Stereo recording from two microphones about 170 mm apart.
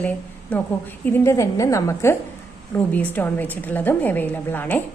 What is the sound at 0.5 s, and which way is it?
A woman's voice, 10° left (ahead or behind).